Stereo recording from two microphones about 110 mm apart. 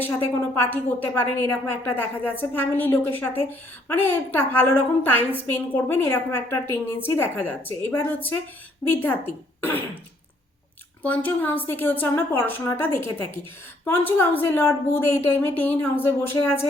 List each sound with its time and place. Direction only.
0.0 s a woman's voice: 20° left (ahead or behind)
11.0 s a woman's voice: 15° left (ahead or behind)